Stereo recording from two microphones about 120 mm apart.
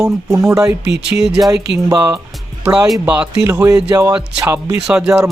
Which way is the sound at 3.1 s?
10° right (ahead or behind).